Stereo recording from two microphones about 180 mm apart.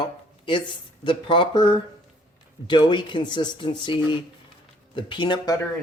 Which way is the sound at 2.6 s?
25° left (ahead or behind).